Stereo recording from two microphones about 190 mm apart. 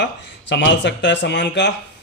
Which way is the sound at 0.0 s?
65° left (ahead or behind).